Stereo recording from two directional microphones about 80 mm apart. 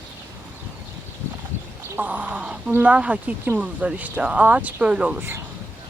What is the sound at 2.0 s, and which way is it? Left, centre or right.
Speech, centre.